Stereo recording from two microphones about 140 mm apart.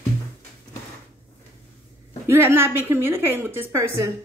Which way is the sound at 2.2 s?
15° right (ahead or behind).